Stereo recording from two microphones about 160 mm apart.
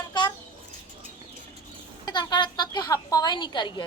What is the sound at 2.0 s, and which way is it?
A woman's voice, 25° left (ahead or behind).